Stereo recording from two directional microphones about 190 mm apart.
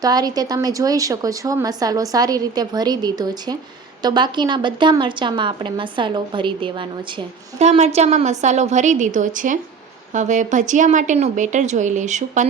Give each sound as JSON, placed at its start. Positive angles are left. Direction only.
{"t": 0.0, "sound": "a woman's voice", "side_deg": -20}